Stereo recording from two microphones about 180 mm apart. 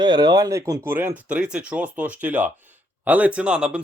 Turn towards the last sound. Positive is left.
turn(degrees=-5)  # may be behind; listen again after turning